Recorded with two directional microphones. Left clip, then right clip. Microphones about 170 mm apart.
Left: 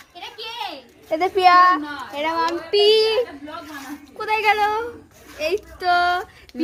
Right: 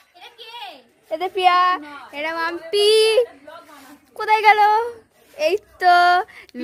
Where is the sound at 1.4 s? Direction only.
45° right (ahead or behind); by 3.2 s 75° right (ahead or behind).